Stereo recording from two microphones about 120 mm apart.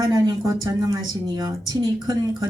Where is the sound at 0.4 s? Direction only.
30° right (ahead or behind).